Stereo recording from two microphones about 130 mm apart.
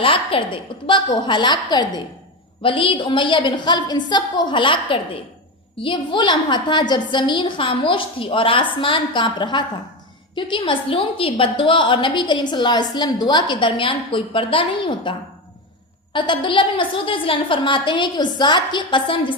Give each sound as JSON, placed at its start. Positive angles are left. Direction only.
{"t": 0.0, "sound": "a woman's voice", "side_deg": 40}
{"t": 16.1, "sound": "a woman's voice", "side_deg": 40}